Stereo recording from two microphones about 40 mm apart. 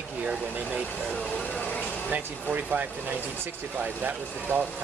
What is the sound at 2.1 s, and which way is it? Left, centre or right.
Speech, right.